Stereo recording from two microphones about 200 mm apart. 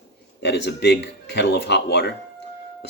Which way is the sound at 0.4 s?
55° left (ahead or behind).